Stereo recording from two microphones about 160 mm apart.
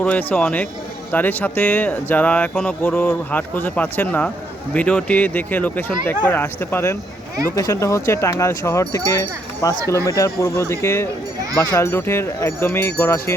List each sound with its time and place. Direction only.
0.0 s speech: 10° left (ahead or behind)